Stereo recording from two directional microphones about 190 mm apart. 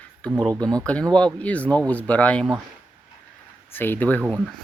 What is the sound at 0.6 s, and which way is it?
Speech, 20° right (ahead or behind).